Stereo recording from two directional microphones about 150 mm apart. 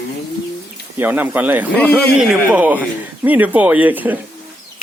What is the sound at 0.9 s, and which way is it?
Speech, 10° right (ahead or behind).